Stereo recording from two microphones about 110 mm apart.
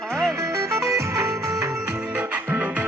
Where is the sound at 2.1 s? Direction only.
15° right (ahead or behind).